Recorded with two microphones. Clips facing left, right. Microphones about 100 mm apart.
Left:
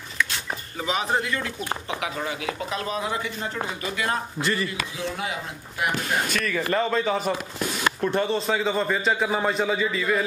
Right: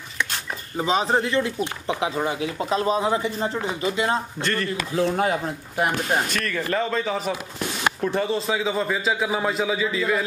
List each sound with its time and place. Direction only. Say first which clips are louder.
0.7 s speech: right 4 dB; 30° right (ahead or behind)
4.4 s a man's voice: even; 5° left (ahead or behind)
4.6 s speech: right 7 dB; 45° right (ahead or behind)
6.2 s a man's voice: left 1 dB; centre (ahead or behind)